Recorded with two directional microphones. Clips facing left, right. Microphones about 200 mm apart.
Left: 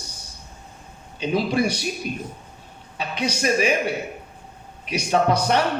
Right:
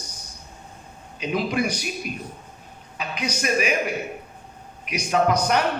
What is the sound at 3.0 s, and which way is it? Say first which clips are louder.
Speech: left 3 dB; 30° left (ahead or behind).